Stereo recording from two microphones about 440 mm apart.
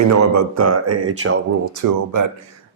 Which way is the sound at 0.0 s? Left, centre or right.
Right.